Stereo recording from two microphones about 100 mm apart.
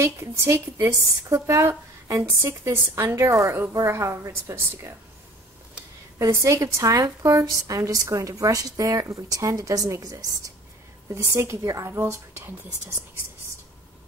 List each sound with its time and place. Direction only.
0.0 s a woman's voice: 25° right (ahead or behind)
6.1 s a woman's voice: 30° right (ahead or behind)